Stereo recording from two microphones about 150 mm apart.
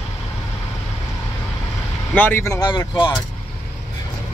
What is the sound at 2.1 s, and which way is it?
Speech, 15° left (ahead or behind).